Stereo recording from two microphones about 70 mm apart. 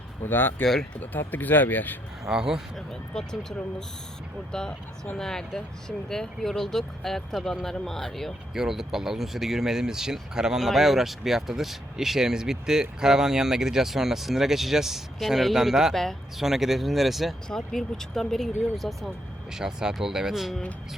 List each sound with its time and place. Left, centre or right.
0.3 s speech: left
0.6 s speech: centre
1.3 s speech: left
2.2 s speech: centre
2.7 s speech: centre
4.5 s speech: centre